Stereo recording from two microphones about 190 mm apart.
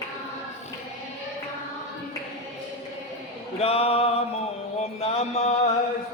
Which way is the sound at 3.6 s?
30° left (ahead or behind).